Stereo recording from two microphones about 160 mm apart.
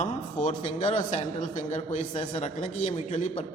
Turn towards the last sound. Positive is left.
turn(degrees=45)  # may be behind; listen again after turning